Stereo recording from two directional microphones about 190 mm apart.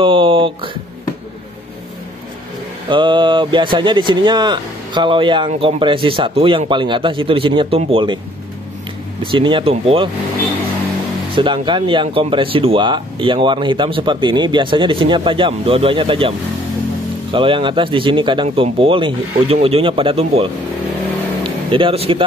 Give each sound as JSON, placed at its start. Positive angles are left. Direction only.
{"t": 0.0, "sound": "speech", "side_deg": -25}
{"t": 2.9, "sound": "speech", "side_deg": -25}
{"t": 9.2, "sound": "speech", "side_deg": -25}
{"t": 11.3, "sound": "speech", "side_deg": -25}
{"t": 21.6, "sound": "speech", "side_deg": -25}